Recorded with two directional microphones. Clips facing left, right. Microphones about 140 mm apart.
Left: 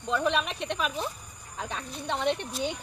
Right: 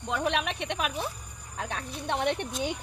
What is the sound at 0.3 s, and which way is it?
Speech, 70° right (ahead or behind).